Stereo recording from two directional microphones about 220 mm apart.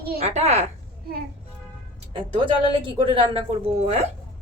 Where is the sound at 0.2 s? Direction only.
30° right (ahead or behind).